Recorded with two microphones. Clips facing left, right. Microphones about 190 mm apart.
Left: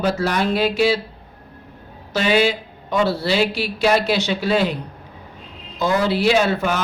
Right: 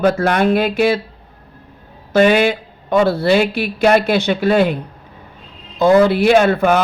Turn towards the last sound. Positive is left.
turn(degrees=-55)  # may be behind; listen again after turning